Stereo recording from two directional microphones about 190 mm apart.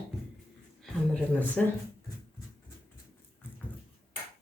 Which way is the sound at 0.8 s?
5° left (ahead or behind).